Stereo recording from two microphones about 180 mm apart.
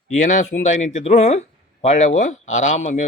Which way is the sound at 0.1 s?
45° left (ahead or behind).